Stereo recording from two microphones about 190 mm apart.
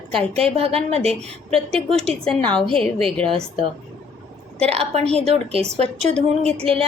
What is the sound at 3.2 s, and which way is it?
Speech, 30° right (ahead or behind).